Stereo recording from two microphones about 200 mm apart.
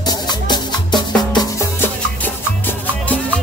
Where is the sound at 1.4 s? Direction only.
10° left (ahead or behind).